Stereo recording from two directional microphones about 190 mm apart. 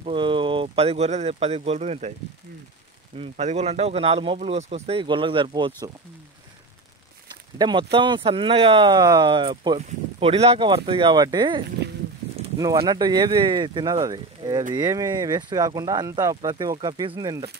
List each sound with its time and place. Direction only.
0.0 s speech: 25° right (ahead or behind)
3.2 s speech: 35° right (ahead or behind)
7.5 s speech: 25° right (ahead or behind)
9.8 s speech: 35° right (ahead or behind)